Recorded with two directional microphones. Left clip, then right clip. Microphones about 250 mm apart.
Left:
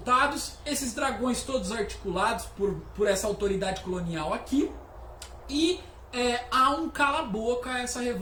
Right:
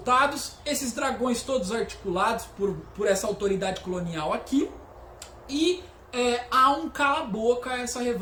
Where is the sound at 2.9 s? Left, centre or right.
Centre.